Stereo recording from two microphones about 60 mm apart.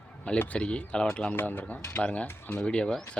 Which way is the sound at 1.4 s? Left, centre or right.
Left.